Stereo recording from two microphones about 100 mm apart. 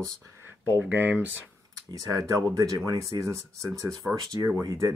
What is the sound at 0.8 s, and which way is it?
Speech, 20° right (ahead or behind).